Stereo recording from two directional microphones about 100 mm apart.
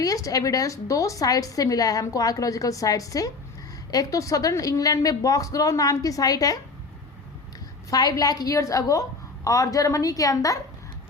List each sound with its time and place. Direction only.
0.0 s a woman's voice: 35° left (ahead or behind)
7.9 s a woman's voice: 40° left (ahead or behind)